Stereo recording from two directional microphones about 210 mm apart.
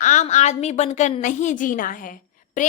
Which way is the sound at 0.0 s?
35° left (ahead or behind).